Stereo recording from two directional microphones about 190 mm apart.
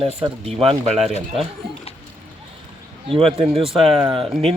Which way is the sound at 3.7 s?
30° right (ahead or behind).